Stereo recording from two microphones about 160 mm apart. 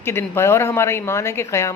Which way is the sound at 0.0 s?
15° left (ahead or behind).